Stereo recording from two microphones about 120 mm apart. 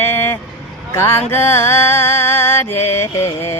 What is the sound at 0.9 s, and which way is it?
Music, 20° left (ahead or behind).